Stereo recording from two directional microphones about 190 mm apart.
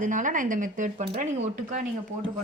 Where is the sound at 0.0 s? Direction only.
40° right (ahead or behind).